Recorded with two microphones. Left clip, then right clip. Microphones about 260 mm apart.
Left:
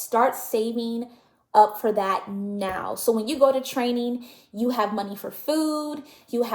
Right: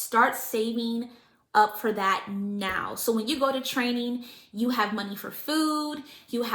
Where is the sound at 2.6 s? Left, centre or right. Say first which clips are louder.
Left 3 dB; centre.